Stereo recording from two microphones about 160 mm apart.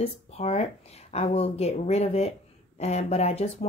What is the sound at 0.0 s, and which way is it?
Speech, 40° left (ahead or behind).